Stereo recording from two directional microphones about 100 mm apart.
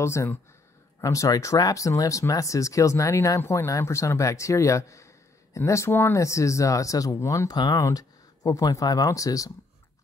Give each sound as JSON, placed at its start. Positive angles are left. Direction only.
{"t": 0.0, "sound": "speech", "side_deg": 30}